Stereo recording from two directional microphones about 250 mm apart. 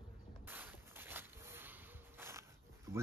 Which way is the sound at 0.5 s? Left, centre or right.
Centre.